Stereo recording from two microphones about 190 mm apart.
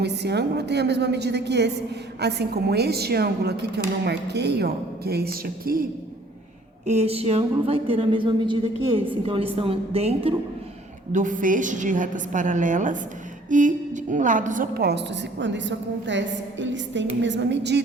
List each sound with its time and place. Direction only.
0.0 s a woman's voice: 60° right (ahead or behind)
6.8 s a woman's voice: 35° right (ahead or behind); by 17.8 s 65° right (ahead or behind)